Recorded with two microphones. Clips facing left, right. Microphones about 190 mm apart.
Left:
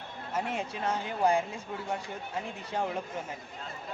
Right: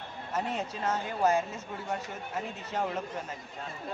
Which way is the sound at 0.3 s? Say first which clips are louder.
Even; 10° left (ahead or behind).